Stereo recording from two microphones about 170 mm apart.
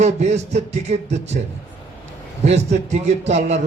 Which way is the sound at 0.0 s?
40° right (ahead or behind).